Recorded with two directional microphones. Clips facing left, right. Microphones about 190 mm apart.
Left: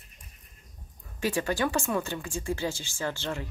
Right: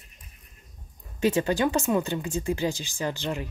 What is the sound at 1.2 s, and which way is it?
Speech, 20° right (ahead or behind).